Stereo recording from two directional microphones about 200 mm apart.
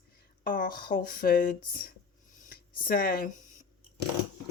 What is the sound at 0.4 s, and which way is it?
Speech, 45° left (ahead or behind).